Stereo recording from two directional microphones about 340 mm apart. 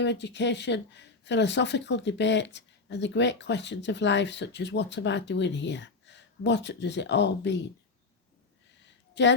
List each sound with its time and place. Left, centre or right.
0.0 s speech: left
9.2 s speech: left